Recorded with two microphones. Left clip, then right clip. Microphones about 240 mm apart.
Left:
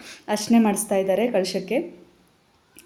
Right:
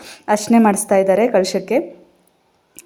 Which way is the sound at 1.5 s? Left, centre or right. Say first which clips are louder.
Right 7 dB; centre.